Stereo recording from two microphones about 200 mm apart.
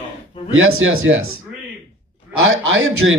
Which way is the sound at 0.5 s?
90° right.